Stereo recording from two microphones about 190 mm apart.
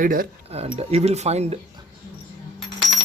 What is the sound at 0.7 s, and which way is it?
Speech, 35° right (ahead or behind).